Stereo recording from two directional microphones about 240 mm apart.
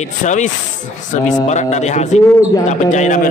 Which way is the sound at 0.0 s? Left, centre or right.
Left.